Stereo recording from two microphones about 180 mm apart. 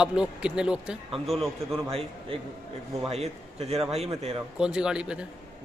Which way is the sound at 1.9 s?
30° right (ahead or behind).